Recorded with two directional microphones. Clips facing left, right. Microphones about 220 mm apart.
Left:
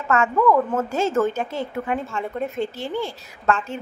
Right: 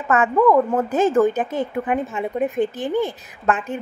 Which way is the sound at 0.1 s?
15° right (ahead or behind).